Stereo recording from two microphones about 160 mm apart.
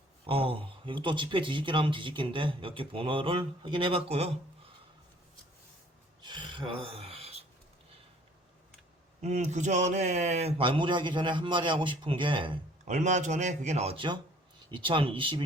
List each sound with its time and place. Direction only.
0.3 s speech: 35° right (ahead or behind)
6.2 s a sound: 30° right (ahead or behind)
9.2 s speech: 45° right (ahead or behind)
10.6 s speech: 30° right (ahead or behind)
12.9 s speech: 45° right (ahead or behind); by 15.4 s 30° right (ahead or behind)